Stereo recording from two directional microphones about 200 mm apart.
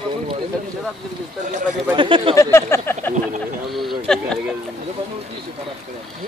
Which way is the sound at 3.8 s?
Centre (ahead or behind).